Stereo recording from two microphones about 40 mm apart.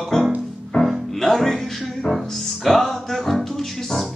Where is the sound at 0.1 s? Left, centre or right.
Centre.